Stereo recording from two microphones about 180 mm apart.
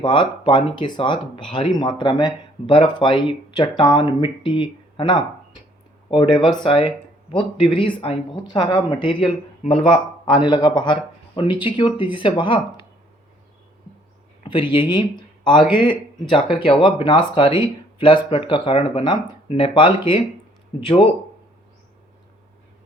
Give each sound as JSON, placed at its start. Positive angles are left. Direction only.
{"t": 0.0, "sound": "speech", "side_deg": 25}
{"t": 14.4, "sound": "speech", "side_deg": 25}